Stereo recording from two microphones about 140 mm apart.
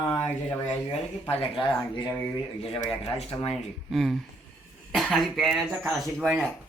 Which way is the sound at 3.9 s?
Centre (ahead or behind).